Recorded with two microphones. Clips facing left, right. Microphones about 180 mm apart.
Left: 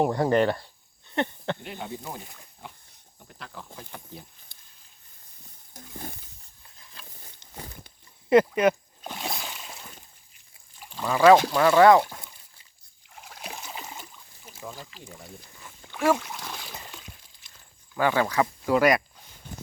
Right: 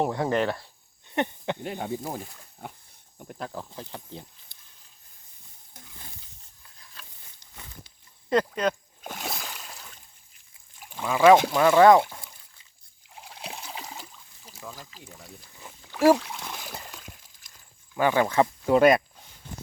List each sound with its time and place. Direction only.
0.0 s speech: centre (ahead or behind)
1.0 s a sound: 15° right (ahead or behind)
1.6 s speech: 40° right (ahead or behind); by 4.3 s 25° right (ahead or behind)
5.7 s stir: 50° left (ahead or behind)
8.3 s speech: 10° left (ahead or behind)
9.2 s a sound: centre (ahead or behind)
10.8 s speech: 5° right (ahead or behind)
16.0 s speech: 35° right (ahead or behind)
16.5 s a sound: 5° right (ahead or behind)
17.9 s speech: 20° right (ahead or behind)